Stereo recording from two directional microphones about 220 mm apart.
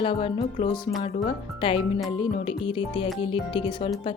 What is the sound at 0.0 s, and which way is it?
Speech, 25° left (ahead or behind).